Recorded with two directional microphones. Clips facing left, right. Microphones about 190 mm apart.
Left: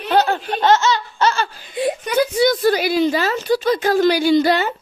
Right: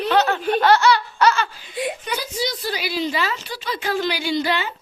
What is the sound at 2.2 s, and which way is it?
A woman's voice, 55° left (ahead or behind).